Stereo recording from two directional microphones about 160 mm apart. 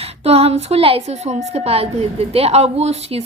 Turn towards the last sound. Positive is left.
turn(degrees=-40)  # may be behind; listen again after turning